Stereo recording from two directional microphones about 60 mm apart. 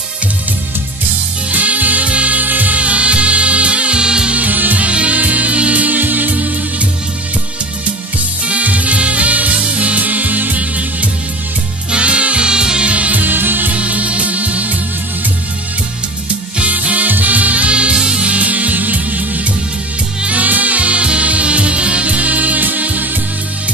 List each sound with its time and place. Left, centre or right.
1.5 s music: right
4.4 s music: right
8.5 s music: right
16.5 s music: right